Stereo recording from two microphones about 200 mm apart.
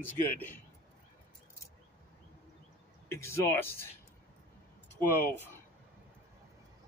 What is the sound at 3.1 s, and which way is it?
Speech, 15° left (ahead or behind).